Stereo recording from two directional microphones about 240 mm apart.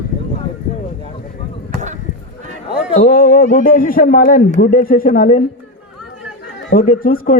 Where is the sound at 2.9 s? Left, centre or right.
Left.